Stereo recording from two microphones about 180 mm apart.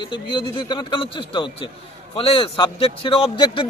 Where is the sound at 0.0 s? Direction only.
25° left (ahead or behind).